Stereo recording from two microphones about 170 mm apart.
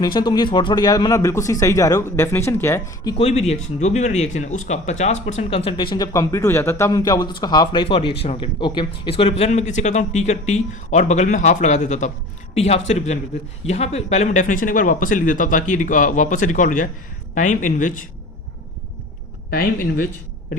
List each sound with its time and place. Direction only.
0.0 s speech: 25° left (ahead or behind)
3.2 s speech: 35° left (ahead or behind)
19.5 s speech: 60° left (ahead or behind)